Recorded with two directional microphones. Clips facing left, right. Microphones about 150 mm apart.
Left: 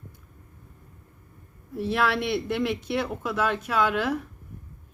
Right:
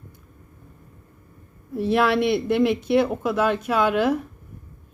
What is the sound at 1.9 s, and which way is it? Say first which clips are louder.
Speech: right 6 dB; 20° right (ahead or behind).